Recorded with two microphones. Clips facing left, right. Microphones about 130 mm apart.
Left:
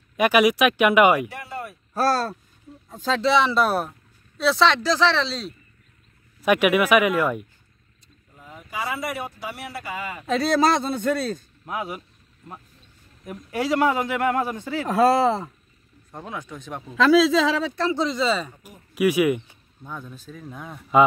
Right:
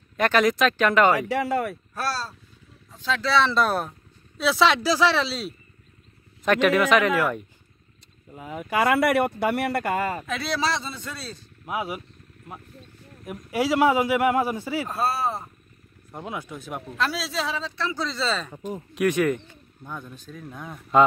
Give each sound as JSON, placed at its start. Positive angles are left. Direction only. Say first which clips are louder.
{"t": 0.2, "sound": "speech", "louder": "left 2 dB", "side_deg": 10}
{"t": 1.3, "sound": "speech", "louder": "right 10 dB", "side_deg": -85}
{"t": 2.0, "sound": "a man's voice", "louder": "left 9 dB", "side_deg": 50}
{"t": 3.2, "sound": "a man's voice", "louder": "left 2 dB", "side_deg": 20}
{"t": 6.4, "sound": "speech", "louder": "left 1 dB", "side_deg": 10}
{"t": 8.4, "sound": "speech", "louder": "right 8 dB", "side_deg": -70}
{"t": 10.2, "sound": "a man's voice", "louder": "left 7 dB", "side_deg": 40}
{"t": 11.6, "sound": "a man's voice", "louder": "right 2 dB", "side_deg": -10}
{"t": 13.2, "sound": "a man's voice", "louder": "right 1 dB", "side_deg": -10}
{"t": 14.9, "sound": "speech", "louder": "left 11 dB", "side_deg": 90}
{"t": 16.1, "sound": "a man's voice", "louder": "right 1 dB", "side_deg": -10}
{"t": 17.5, "sound": "speech", "louder": "left 7 dB", "side_deg": 65}
{"t": 17.9, "sound": "a man's voice", "louder": "left 3 dB", "side_deg": 15}